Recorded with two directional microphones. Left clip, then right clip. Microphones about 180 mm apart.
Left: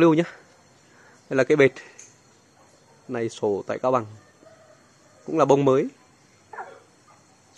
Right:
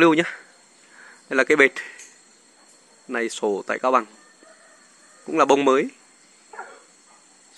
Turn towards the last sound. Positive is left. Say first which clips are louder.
# right 1 dB
turn(degrees=0)  # may be behind; listen again after turning